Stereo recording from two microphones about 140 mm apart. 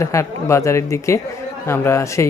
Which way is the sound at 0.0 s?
20° left (ahead or behind).